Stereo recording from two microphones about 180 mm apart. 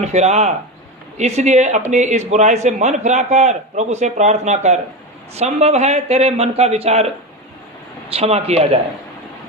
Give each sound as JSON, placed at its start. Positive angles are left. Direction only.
{"t": 0.0, "sound": "a man's voice", "side_deg": -40}
{"t": 8.1, "sound": "a man's voice", "side_deg": -35}